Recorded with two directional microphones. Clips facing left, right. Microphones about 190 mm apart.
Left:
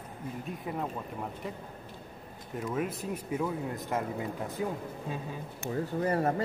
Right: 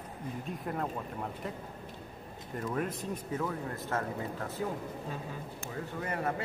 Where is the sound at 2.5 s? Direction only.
5° left (ahead or behind).